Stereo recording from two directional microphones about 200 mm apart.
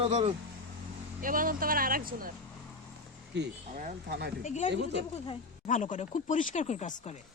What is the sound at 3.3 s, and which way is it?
Speech, 60° right (ahead or behind).